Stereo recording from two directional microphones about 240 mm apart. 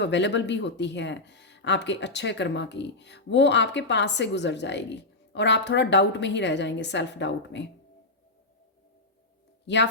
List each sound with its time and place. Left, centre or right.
0.0 s speech: left
9.6 s speech: left